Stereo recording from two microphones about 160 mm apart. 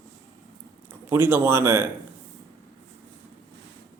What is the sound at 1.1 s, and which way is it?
Speech, 15° right (ahead or behind).